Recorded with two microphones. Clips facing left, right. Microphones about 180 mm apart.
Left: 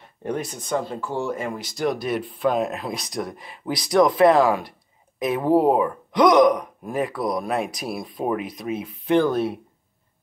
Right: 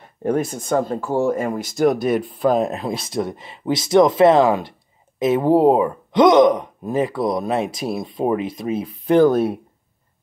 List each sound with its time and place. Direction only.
0.2 s speech: 50° right (ahead or behind)